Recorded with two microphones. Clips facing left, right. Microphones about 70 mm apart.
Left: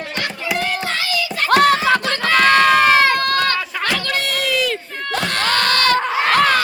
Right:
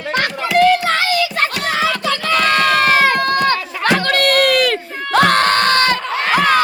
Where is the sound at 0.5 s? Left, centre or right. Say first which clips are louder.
Right 10 dB; right.